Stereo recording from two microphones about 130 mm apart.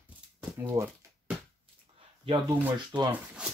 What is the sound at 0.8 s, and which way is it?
Speech, 25° right (ahead or behind).